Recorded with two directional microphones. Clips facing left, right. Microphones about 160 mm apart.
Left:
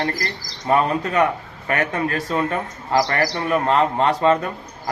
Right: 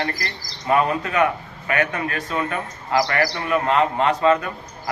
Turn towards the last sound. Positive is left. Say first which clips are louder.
# left 1 dB
turn(degrees=30)  # may be behind; listen again after turning